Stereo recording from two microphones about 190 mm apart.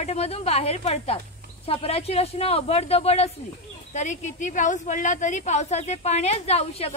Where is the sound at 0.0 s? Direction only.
35° left (ahead or behind).